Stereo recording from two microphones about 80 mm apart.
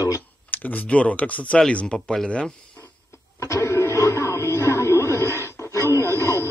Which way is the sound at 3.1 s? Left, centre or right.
Left.